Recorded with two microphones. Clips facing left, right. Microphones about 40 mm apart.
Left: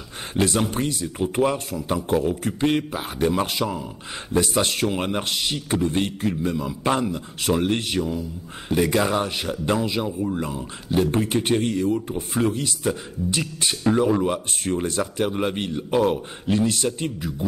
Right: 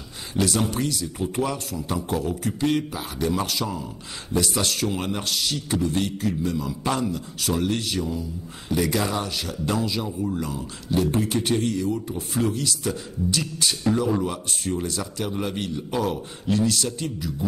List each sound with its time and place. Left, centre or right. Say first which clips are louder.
0.3 s a man's voice: left 2 dB; left
10.0 s speech: left 2 dB; centre
10.3 s a man's voice: left 1 dB; left